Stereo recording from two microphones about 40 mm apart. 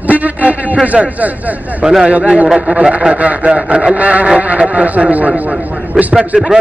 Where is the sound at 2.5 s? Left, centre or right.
Right.